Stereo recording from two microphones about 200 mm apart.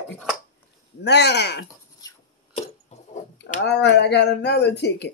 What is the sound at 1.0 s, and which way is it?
Speech, 55° left (ahead or behind).